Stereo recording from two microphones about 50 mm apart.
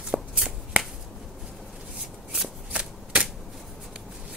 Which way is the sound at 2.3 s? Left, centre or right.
Right.